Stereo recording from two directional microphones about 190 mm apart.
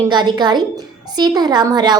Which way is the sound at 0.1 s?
25° right (ahead or behind).